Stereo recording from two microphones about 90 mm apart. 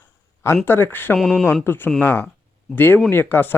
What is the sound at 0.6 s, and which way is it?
Speech, 25° left (ahead or behind).